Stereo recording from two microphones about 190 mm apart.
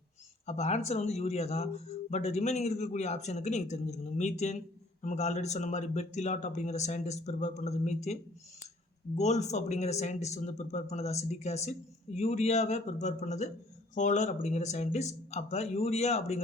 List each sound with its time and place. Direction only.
0.4 s speech: 35° left (ahead or behind)